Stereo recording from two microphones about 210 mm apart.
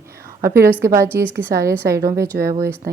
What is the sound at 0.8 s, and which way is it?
Speech, 15° right (ahead or behind).